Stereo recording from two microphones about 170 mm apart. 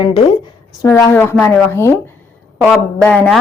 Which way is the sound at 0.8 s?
15° left (ahead or behind).